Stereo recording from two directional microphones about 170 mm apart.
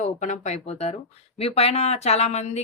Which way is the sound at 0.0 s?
45° left (ahead or behind).